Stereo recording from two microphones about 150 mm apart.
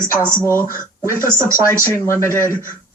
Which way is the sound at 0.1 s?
10° left (ahead or behind).